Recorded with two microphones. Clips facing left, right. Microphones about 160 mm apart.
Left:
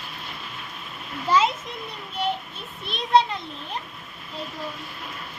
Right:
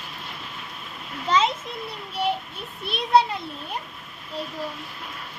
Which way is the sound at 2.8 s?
10° right (ahead or behind).